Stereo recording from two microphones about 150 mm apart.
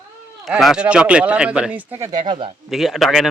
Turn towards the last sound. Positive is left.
turn(degrees=0)  # may be behind; listen again after turning